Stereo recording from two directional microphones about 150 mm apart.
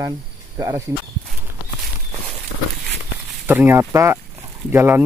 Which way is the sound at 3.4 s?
10° right (ahead or behind).